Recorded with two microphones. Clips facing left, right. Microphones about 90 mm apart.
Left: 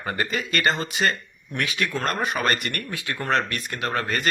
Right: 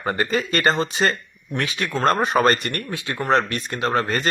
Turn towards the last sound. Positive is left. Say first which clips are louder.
# right 4 dB
turn(degrees=-30)  # may be behind; listen again after turning